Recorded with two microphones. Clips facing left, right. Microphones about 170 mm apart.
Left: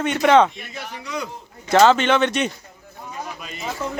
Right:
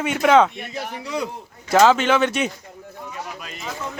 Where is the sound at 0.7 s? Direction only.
30° right (ahead or behind).